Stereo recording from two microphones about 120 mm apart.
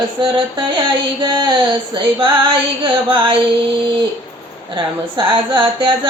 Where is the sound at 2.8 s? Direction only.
45° right (ahead or behind).